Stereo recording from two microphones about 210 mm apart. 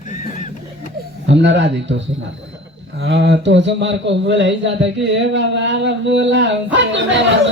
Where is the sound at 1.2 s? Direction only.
60° right (ahead or behind).